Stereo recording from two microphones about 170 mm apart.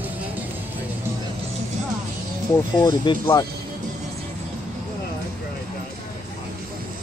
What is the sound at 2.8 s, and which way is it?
Speech, 20° left (ahead or behind).